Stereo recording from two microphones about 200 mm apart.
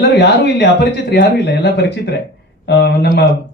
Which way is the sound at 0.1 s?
55° left (ahead or behind).